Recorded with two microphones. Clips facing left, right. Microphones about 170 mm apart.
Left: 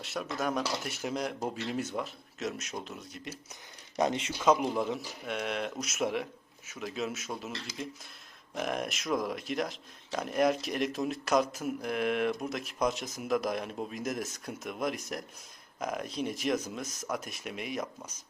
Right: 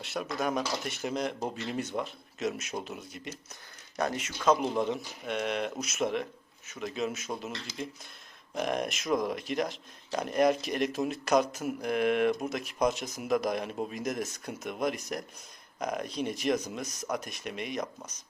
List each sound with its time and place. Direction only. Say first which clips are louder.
0.0 s speech: right 1 dB; centre (ahead or behind)
3.9 s speech: left 3 dB; 20° left (ahead or behind)
4.4 s speech: right 1 dB; 10° left (ahead or behind)